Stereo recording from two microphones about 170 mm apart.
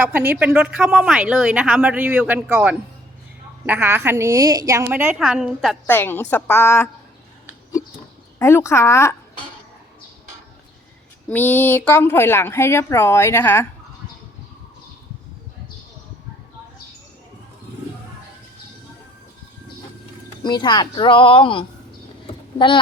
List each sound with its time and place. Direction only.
0.0 s a woman's voice: 10° right (ahead or behind)
5.9 s a woman's voice: 15° left (ahead or behind)
8.4 s a woman's voice: 15° left (ahead or behind)
11.3 s a woman's voice: 10° left (ahead or behind)
20.4 s speech: 25° left (ahead or behind)